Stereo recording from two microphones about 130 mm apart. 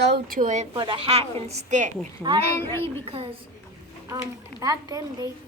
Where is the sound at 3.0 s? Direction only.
45° right (ahead or behind).